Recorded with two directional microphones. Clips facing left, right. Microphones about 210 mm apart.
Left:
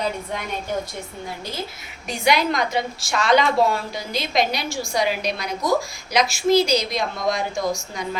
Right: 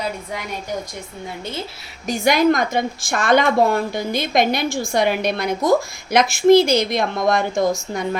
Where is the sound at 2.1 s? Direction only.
45° right (ahead or behind).